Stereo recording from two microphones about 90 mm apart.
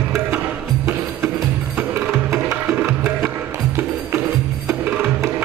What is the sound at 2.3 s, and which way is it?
Music, 30° right (ahead or behind).